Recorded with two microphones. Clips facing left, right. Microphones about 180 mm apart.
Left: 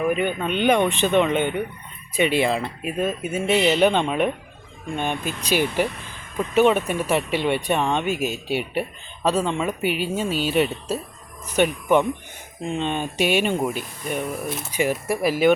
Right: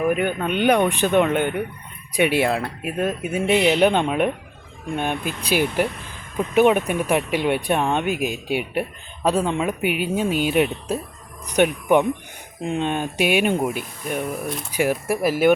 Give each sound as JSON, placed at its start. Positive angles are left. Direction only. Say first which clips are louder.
{"t": 0.0, "sound": "speech", "louder": "right 1 dB", "side_deg": -10}
{"t": 14.7, "sound": "speech", "louder": "right 2 dB", "side_deg": -10}
{"t": 15.2, "sound": "speech", "louder": "even", "side_deg": -45}